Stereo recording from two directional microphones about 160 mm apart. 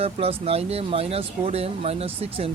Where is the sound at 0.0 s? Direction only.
35° right (ahead or behind).